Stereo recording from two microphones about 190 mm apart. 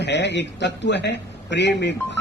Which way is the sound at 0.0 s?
65° left (ahead or behind).